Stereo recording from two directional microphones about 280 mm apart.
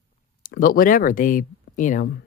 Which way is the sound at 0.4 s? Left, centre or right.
Left.